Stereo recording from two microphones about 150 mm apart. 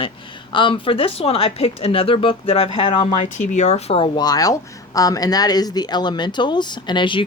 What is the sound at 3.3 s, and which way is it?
Speech, 50° left (ahead or behind).